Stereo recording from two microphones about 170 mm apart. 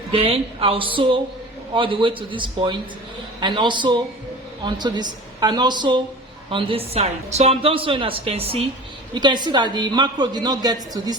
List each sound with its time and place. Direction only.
0.1 s a man's voice: 35° right (ahead or behind)